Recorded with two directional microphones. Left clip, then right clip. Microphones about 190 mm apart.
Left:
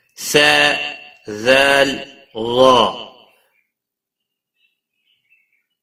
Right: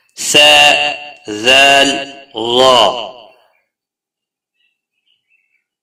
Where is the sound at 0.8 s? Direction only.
50° right (ahead or behind).